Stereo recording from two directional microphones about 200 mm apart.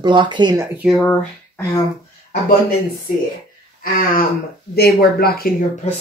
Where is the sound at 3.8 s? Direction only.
45° left (ahead or behind).